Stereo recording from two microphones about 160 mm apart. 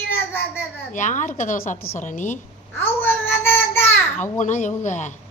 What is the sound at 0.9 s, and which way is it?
A woman's voice, 50° left (ahead or behind).